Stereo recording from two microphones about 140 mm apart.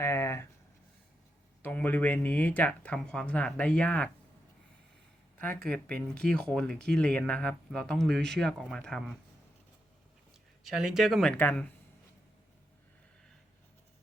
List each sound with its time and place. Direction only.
0.0 s a sound: 20° left (ahead or behind)
1.6 s speech: 10° left (ahead or behind)
5.4 s speech: 10° left (ahead or behind)
10.6 s speech: 5° right (ahead or behind)